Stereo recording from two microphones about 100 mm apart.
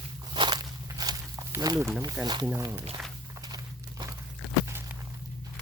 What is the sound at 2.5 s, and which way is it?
Speech, 25° right (ahead or behind).